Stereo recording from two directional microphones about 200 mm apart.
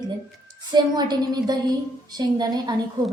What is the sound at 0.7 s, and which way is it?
A woman's voice, 20° right (ahead or behind).